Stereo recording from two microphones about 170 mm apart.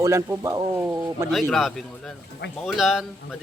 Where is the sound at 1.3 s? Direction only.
Centre (ahead or behind).